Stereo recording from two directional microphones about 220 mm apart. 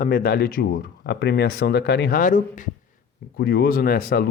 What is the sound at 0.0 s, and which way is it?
Speech, 40° left (ahead or behind).